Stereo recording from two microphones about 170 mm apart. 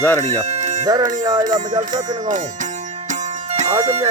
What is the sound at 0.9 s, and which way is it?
Speech, 25° right (ahead or behind).